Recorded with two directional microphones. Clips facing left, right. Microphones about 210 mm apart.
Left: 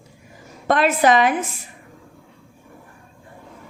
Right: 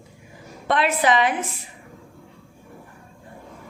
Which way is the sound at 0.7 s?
45° left (ahead or behind).